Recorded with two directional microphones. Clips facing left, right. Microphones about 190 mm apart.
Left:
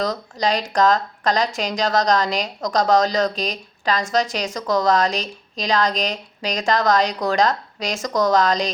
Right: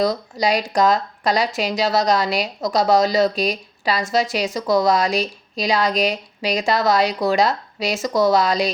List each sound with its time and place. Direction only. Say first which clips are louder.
0.0 s speech: right 3 dB; 10° right (ahead or behind)